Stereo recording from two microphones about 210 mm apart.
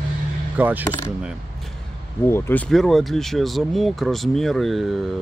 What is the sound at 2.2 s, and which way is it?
Speech, 10° left (ahead or behind).